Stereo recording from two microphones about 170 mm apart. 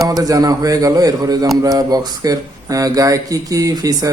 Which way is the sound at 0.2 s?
20° right (ahead or behind).